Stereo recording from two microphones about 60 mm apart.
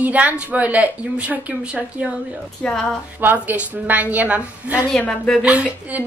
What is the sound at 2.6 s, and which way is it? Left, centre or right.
Speech, centre.